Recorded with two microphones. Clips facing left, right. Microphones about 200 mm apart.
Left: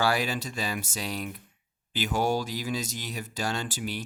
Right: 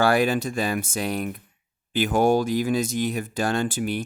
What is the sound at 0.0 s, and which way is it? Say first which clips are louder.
Speech: right 7 dB; 55° right (ahead or behind).